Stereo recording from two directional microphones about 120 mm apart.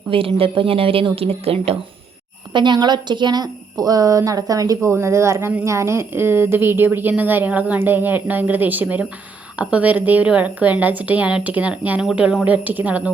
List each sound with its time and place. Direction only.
0.1 s speech: 50° right (ahead or behind)
2.5 s a woman's voice: 40° right (ahead or behind); by 13.0 s 15° right (ahead or behind)